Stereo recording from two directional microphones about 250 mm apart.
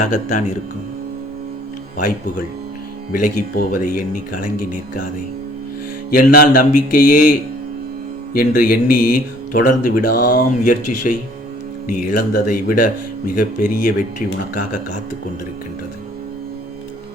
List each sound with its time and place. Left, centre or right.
0.0 s speech: left
3.1 s speech: left
6.1 s speech: left
11.9 s speech: left